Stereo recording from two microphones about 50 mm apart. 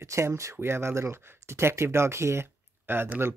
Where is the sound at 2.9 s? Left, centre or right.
Right.